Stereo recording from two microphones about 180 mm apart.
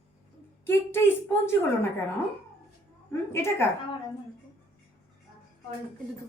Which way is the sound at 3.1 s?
15° left (ahead or behind).